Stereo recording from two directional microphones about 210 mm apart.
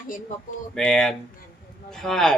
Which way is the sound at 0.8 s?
5° left (ahead or behind).